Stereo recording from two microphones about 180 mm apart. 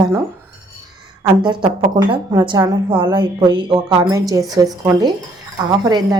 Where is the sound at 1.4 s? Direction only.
25° right (ahead or behind).